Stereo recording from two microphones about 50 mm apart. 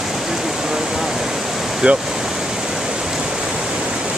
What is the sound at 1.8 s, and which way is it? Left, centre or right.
Speech, right.